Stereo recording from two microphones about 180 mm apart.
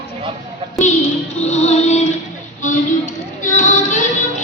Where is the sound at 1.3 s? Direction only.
40° left (ahead or behind).